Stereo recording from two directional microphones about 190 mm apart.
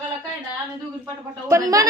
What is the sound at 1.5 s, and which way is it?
Speech, 20° right (ahead or behind).